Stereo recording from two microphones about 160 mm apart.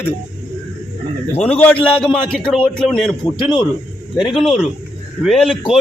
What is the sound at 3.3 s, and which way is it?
Speech, 30° left (ahead or behind).